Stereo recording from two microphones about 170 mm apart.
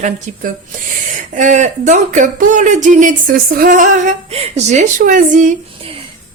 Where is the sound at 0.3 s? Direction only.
50° right (ahead or behind).